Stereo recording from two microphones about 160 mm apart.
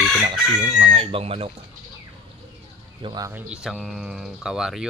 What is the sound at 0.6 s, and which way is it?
Speech, 45° right (ahead or behind).